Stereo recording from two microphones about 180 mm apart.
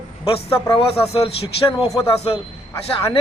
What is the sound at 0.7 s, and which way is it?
A man's voice, 30° left (ahead or behind).